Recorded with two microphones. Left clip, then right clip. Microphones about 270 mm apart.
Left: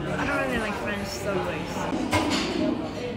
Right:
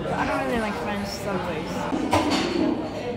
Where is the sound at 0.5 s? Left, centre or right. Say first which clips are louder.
Right 2 dB; right.